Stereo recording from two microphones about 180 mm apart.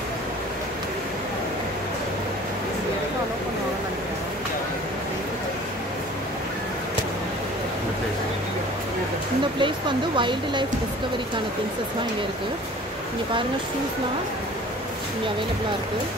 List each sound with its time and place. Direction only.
9.6 s speech: 25° right (ahead or behind)